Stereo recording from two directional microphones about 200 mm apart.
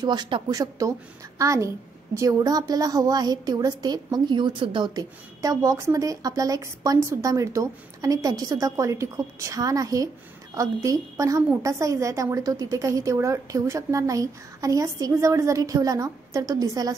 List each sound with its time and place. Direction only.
0.0 s a woman's voice: 20° right (ahead or behind)